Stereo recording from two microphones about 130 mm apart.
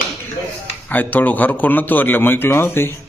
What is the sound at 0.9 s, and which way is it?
A man's voice, 15° left (ahead or behind).